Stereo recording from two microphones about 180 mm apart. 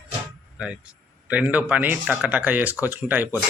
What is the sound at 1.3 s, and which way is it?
Speech, 10° right (ahead or behind).